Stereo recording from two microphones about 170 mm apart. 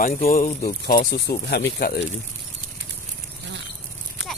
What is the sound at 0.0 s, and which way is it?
Speech, 55° left (ahead or behind).